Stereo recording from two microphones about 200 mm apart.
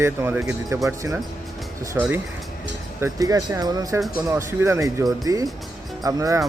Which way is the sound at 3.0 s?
15° right (ahead or behind).